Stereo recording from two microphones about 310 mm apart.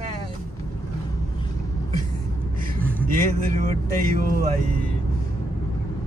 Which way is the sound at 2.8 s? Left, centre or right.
Centre.